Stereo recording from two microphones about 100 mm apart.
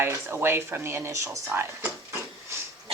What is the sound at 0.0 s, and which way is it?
Speech, 25° right (ahead or behind).